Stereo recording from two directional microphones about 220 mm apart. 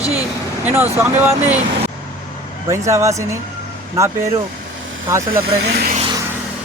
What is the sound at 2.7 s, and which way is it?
Speech, 15° right (ahead or behind).